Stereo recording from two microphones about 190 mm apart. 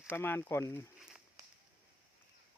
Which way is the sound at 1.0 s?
5° right (ahead or behind).